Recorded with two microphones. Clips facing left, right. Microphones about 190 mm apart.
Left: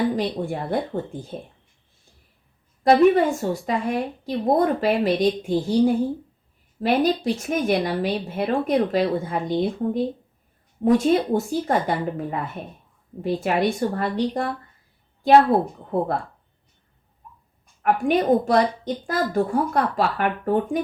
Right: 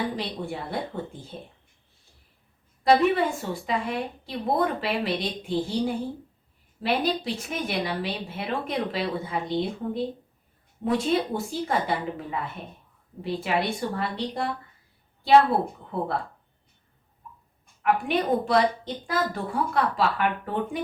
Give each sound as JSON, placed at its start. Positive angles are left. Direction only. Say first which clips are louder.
{"t": 0.2, "sound": "a woman's voice", "louder": "left 7 dB", "side_deg": 45}
{"t": 2.8, "sound": "a woman's voice", "louder": "left 5 dB", "side_deg": 45}
{"t": 15.9, "sound": "a woman's voice", "louder": "left 6 dB", "side_deg": 45}
{"t": 17.8, "sound": "a woman's voice", "louder": "left 5 dB", "side_deg": 45}